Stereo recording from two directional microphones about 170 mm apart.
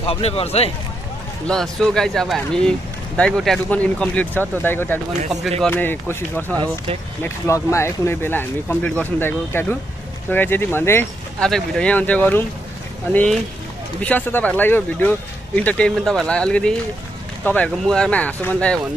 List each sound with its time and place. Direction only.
0.0 s speech: 35° left (ahead or behind)
1.5 s speech: 5° left (ahead or behind)